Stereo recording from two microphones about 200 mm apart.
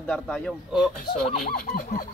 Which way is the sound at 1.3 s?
45° left (ahead or behind).